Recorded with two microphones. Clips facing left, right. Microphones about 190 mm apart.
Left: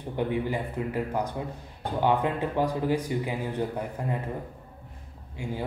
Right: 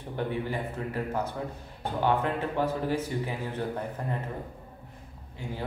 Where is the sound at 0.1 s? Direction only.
15° left (ahead or behind).